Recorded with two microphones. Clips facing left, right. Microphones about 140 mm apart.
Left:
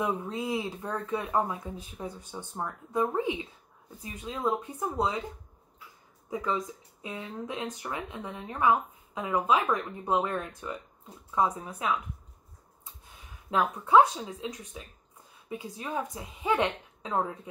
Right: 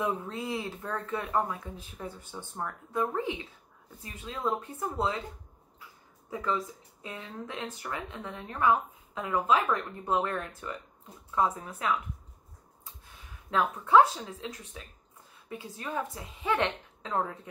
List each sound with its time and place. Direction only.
0.0 s speech: 10° left (ahead or behind)
6.3 s speech: 15° left (ahead or behind)
13.5 s speech: 15° left (ahead or behind)